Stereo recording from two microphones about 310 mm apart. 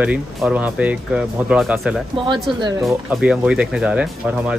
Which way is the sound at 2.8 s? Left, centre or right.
Centre.